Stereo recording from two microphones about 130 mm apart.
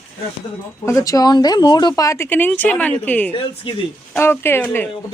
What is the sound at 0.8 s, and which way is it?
Speech, 25° left (ahead or behind).